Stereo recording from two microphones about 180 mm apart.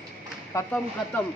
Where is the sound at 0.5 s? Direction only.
15° left (ahead or behind).